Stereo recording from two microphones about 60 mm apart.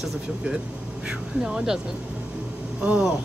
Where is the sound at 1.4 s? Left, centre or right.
Centre.